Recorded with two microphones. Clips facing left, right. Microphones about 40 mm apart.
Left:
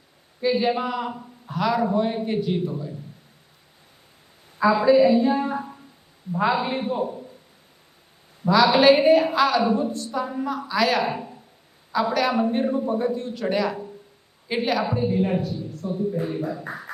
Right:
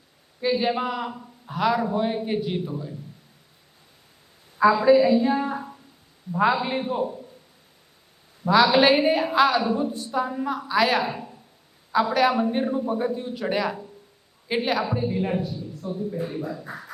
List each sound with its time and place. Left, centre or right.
0.6 s a man's voice: centre
4.5 s a woman's voice: centre
8.6 s a woman's voice: centre
9.6 s a man's voice: centre
9.9 s a woman's voice: centre
11.0 s speech: centre
11.9 s a woman's voice: centre
14.8 s speech: centre
15.1 s a woman's voice: centre
16.2 s speech: centre